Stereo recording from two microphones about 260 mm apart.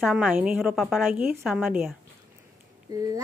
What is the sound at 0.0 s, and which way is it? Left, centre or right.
Speech, centre.